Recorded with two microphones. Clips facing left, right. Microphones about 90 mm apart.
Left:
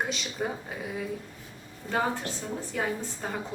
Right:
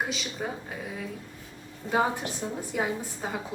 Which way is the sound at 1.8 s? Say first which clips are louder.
Right 2 dB; 15° right (ahead or behind).